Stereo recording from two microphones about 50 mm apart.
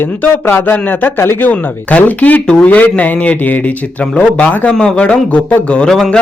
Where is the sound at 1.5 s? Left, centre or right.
Left.